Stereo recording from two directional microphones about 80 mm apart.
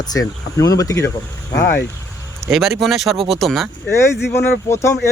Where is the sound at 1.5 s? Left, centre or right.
Left.